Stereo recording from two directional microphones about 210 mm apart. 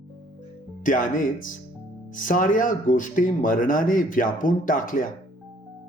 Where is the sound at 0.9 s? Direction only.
40° left (ahead or behind).